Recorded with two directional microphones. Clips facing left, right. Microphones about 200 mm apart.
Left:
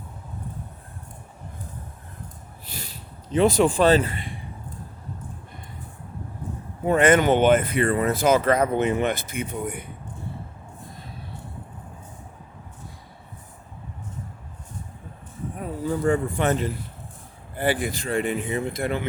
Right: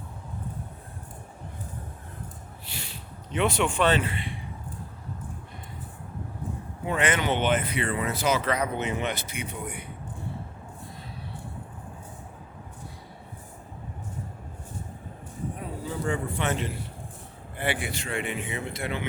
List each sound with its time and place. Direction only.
2.7 s speech: 40° left (ahead or behind)
6.8 s speech: 45° left (ahead or behind)
15.8 s a man's voice: 45° left (ahead or behind)